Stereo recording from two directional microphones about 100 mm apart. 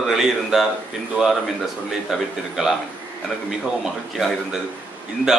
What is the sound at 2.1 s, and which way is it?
Speech, centre (ahead or behind).